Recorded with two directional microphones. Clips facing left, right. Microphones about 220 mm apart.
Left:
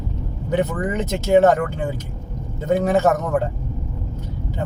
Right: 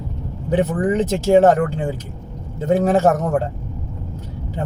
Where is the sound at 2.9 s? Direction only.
30° right (ahead or behind).